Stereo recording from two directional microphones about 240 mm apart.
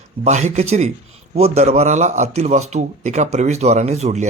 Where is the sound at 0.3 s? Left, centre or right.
Right.